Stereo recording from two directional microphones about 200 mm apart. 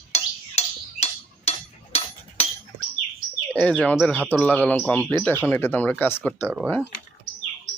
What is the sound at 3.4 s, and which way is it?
Speech, 5° left (ahead or behind).